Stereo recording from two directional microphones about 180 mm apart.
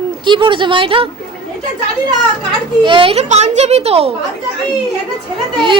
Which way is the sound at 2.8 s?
30° right (ahead or behind).